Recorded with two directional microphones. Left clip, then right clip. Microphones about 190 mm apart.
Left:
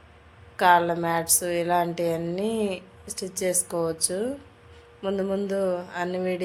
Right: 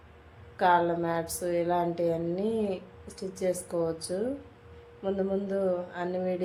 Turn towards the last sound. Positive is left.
turn(degrees=15)  # may be behind; listen again after turning